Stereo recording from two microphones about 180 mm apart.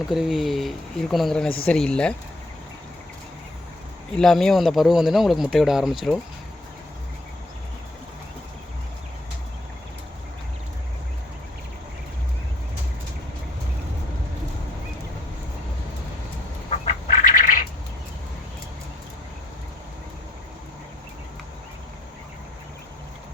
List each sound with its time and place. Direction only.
0.1 s speech: centre (ahead or behind)
4.2 s speech: centre (ahead or behind)
16.6 s duck: 40° left (ahead or behind)